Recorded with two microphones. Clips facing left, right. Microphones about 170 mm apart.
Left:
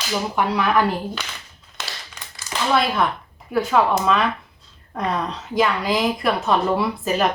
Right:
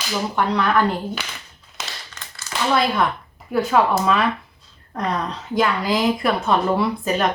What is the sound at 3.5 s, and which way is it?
A woman's voice, centre (ahead or behind).